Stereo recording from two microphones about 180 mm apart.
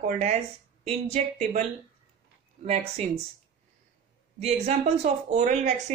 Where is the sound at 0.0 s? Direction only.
40° right (ahead or behind).